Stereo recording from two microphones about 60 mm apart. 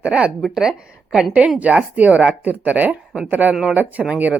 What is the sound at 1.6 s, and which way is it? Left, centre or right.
Speech, right.